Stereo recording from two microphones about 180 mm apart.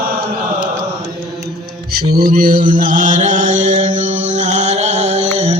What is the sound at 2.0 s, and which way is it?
Mantra, 55° right (ahead or behind).